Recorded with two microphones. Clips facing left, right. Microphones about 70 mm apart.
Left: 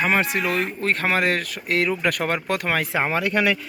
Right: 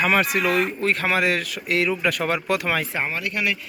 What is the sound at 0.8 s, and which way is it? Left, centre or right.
Speech, left.